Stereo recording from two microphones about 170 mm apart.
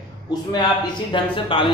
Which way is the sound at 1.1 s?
30° left (ahead or behind).